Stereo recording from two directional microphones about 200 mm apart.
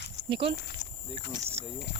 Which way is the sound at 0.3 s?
25° right (ahead or behind).